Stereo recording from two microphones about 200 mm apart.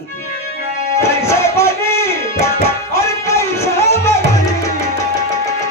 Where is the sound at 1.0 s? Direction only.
15° left (ahead or behind).